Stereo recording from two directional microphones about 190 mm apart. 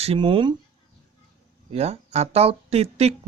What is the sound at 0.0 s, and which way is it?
Speech, 30° right (ahead or behind).